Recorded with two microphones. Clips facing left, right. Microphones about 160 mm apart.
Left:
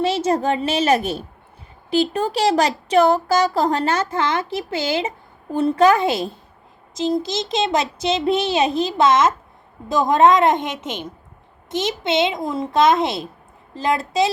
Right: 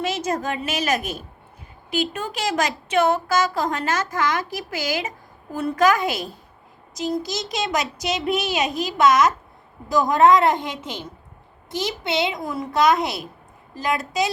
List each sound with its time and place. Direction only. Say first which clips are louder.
0.0 s a woman's voice: left 6 dB; 30° left (ahead or behind)